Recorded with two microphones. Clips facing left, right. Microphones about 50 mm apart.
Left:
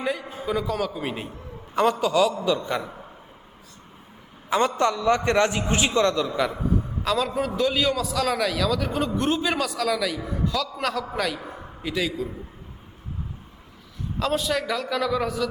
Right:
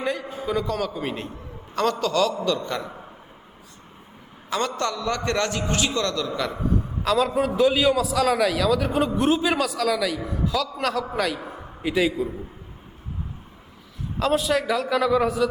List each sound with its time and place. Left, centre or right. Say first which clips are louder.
0.0 s a man's voice: right 1 dB; centre
4.4 s a man's voice: left 4 dB; centre
6.6 s a man's voice: even; centre
11.8 s a man's voice: right 5 dB; centre
14.2 s a man's voice: right 3 dB; centre